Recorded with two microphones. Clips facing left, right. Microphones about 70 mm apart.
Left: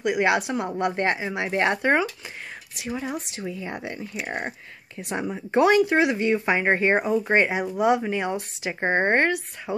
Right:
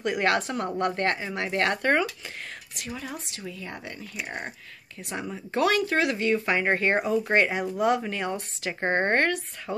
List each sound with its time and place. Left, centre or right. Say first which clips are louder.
0.0 s speech: left 3 dB; centre